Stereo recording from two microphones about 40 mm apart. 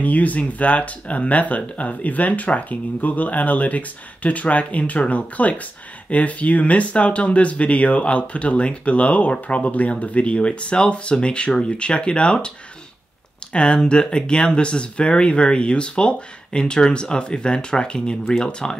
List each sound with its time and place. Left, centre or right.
0.0 s speech: left